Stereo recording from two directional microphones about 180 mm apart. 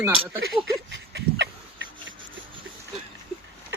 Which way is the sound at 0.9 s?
70° right (ahead or behind).